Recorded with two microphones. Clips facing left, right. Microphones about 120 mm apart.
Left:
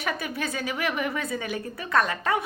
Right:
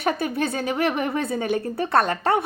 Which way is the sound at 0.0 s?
30° right (ahead or behind).